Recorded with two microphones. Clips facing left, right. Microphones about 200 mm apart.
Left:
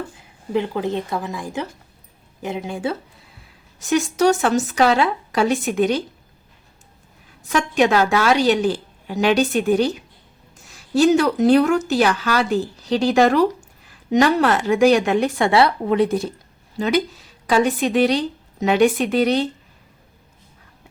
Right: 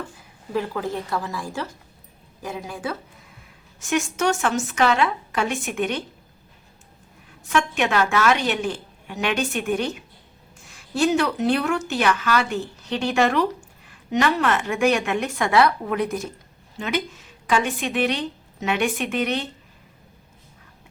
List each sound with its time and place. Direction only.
0.5 s speech: 20° left (ahead or behind)
3.8 s speech: 35° left (ahead or behind)
7.5 s speech: 35° left (ahead or behind)